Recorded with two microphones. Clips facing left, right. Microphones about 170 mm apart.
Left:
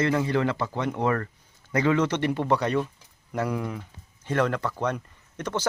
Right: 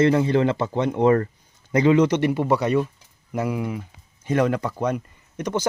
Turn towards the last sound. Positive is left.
turn(degrees=-15)  # may be behind; listen again after turning